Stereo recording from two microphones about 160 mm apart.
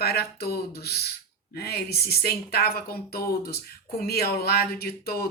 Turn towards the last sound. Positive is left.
turn(degrees=75)  # may be behind; listen again after turning